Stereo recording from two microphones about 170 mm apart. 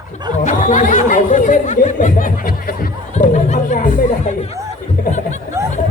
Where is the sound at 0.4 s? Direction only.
45° left (ahead or behind).